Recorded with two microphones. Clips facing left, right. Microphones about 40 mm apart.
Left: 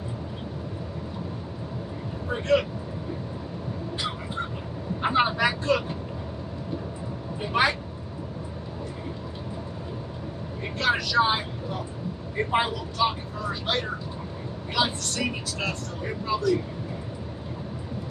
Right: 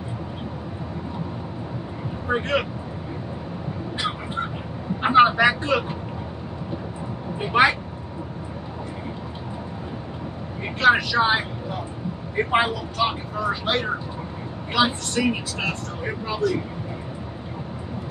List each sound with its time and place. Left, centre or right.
5.0 s vehicle: right
7.3 s vehicle: right
10.8 s speech: right